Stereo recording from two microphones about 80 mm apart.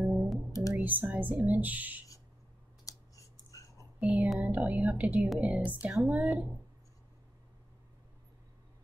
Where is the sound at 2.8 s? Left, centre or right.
Left.